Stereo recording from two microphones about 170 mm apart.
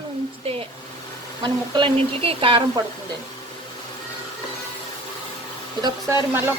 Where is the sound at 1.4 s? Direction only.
30° right (ahead or behind).